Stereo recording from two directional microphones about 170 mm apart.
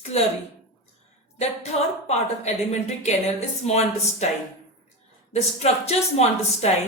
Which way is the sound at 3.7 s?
40° left (ahead or behind).